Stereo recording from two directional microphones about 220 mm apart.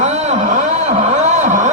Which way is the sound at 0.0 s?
30° right (ahead or behind).